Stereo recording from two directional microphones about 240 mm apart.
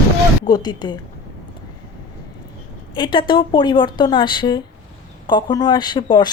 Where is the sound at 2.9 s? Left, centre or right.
Centre.